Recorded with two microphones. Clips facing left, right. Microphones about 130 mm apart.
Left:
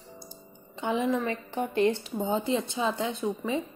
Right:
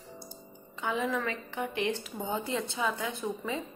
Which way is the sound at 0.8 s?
25° left (ahead or behind).